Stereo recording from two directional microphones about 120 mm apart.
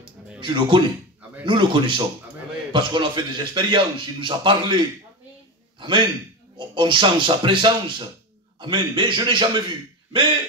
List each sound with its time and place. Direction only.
0.4 s a man's voice: 40° right (ahead or behind)